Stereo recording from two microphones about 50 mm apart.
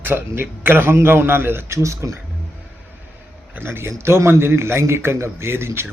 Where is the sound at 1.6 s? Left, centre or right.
Right.